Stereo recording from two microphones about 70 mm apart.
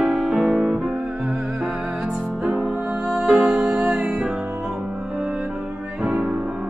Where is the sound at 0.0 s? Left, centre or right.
Centre.